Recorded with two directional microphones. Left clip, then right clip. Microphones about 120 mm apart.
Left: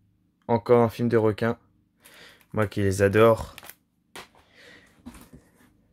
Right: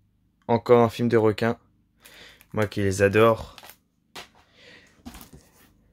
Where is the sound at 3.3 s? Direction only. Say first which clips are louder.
Left 2 dB; 25° left (ahead or behind).